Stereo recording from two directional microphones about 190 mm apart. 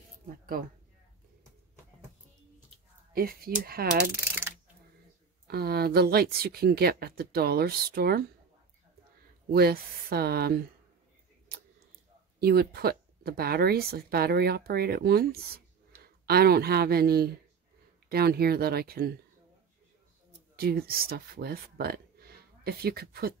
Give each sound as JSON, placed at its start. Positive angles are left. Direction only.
{"t": 0.3, "sound": "speech", "side_deg": -45}
{"t": 3.2, "sound": "mechanisms", "side_deg": -50}
{"t": 4.2, "sound": "mechanisms", "side_deg": -10}
{"t": 5.5, "sound": "speech", "side_deg": -55}
{"t": 9.5, "sound": "speech", "side_deg": -55}
{"t": 12.4, "sound": "speech", "side_deg": -55}
{"t": 20.5, "sound": "speech", "side_deg": -55}